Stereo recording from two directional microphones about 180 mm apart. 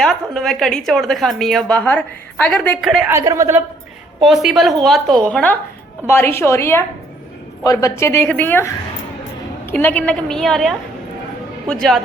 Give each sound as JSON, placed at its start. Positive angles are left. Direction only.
{"t": 0.0, "sound": "speech", "side_deg": 0}
{"t": 3.1, "sound": "speech", "side_deg": -15}
{"t": 4.2, "sound": "a woman's voice", "side_deg": 0}